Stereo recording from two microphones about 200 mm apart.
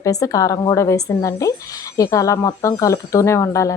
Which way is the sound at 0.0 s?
15° left (ahead or behind).